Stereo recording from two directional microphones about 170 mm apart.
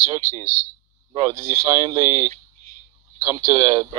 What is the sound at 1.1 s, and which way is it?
Speech, 20° right (ahead or behind).